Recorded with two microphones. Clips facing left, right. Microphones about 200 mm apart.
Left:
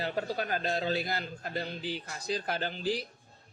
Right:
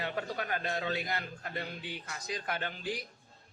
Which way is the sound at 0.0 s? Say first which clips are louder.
Left 3 dB; 30° left (ahead or behind).